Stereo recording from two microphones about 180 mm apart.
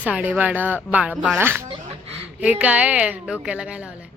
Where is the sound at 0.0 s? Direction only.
10° right (ahead or behind).